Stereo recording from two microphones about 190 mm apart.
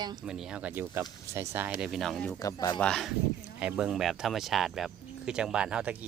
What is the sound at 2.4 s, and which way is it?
Speech, 15° left (ahead or behind).